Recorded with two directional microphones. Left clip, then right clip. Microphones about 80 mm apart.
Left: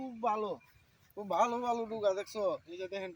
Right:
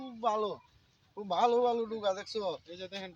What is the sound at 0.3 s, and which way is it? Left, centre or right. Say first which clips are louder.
Speech: right 2 dB; right.